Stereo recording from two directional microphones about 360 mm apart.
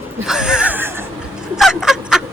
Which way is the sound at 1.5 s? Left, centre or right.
Centre.